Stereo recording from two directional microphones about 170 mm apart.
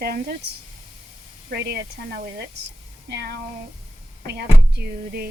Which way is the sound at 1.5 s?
75° right (ahead or behind).